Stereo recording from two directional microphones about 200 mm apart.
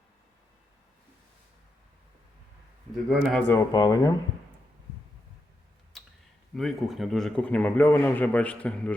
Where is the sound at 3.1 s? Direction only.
Centre (ahead or behind).